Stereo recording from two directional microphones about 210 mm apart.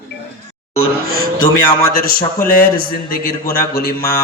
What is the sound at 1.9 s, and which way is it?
A man's voice, 45° left (ahead or behind).